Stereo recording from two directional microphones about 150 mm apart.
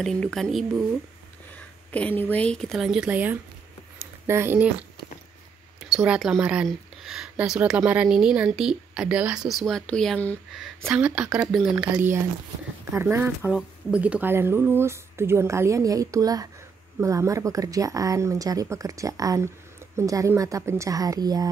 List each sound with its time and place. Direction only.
0.0 s speech: 5° left (ahead or behind)
1.9 s speech: 10° left (ahead or behind); by 4.6 s 15° right (ahead or behind)
5.8 s speech: 5° right (ahead or behind); by 21.5 s 25° right (ahead or behind)